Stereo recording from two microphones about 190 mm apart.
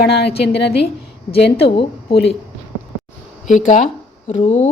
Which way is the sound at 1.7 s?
30° left (ahead or behind).